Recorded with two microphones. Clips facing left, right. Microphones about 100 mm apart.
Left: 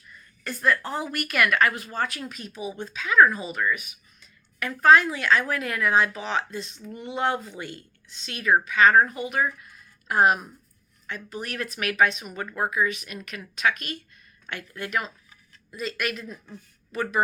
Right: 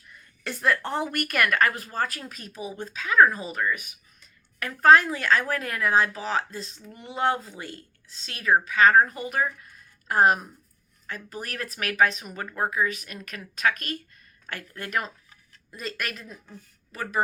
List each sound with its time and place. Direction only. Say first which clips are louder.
0.4 s a woman's voice: left 1 dB; 70° right (ahead or behind)
0.9 s a woman's voice: right 2 dB; 55° right (ahead or behind); by 12.2 s 35° right (ahead or behind)
12.2 s speech: left 2 dB; 20° left (ahead or behind)
12.5 s a woman's voice: left 1 dB; 30° right (ahead or behind)